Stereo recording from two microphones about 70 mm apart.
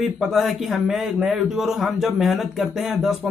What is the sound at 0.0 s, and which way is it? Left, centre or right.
A man's voice, centre.